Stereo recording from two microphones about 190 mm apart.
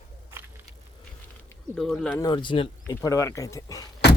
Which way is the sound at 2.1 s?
20° left (ahead or behind).